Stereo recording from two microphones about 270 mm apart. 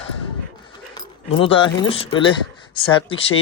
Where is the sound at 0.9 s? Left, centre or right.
Centre.